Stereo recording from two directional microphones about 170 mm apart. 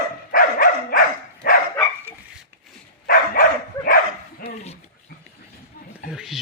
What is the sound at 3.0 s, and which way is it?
Dog, 60° left (ahead or behind).